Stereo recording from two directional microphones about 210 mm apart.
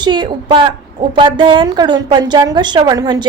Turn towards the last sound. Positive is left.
turn(degrees=-20)  # may be behind; listen again after turning